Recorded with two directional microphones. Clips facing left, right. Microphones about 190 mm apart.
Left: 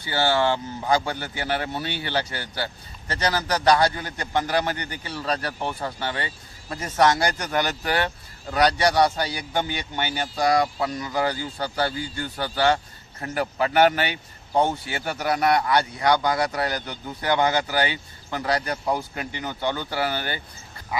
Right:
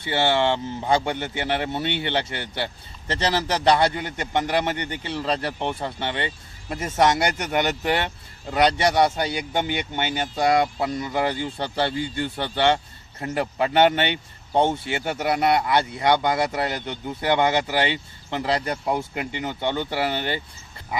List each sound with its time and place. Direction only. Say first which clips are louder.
0.0 s a man's voice: right 1 dB; 25° right (ahead or behind)